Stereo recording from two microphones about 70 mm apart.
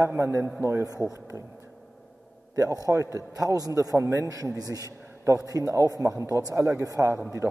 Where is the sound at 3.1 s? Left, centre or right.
Right.